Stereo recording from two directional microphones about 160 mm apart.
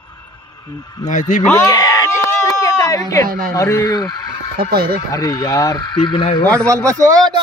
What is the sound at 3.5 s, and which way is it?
Speech, 20° left (ahead or behind).